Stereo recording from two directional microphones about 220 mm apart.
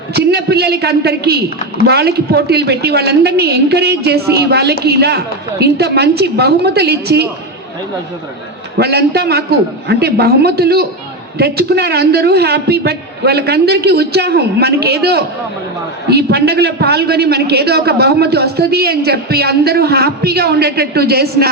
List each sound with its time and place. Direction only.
0.1 s a man's voice: 45° right (ahead or behind)
8.8 s a man's voice: 45° right (ahead or behind)